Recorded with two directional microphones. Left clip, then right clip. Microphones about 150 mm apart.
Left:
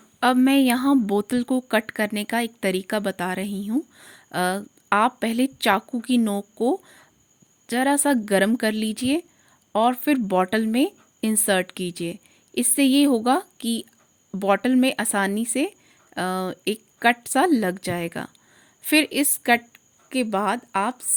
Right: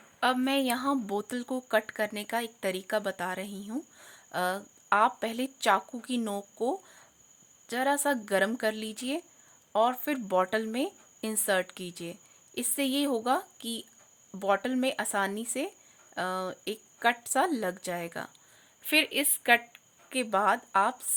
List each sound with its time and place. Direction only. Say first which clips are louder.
0.2 s speech: left 8 dB; 40° left (ahead or behind)